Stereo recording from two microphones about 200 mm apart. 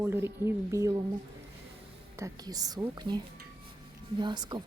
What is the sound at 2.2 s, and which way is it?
A woman's voice, 20° right (ahead or behind).